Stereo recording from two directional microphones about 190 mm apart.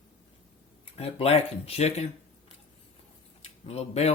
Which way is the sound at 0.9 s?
35° left (ahead or behind).